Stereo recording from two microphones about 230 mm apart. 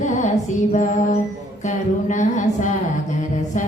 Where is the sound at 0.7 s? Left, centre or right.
Left.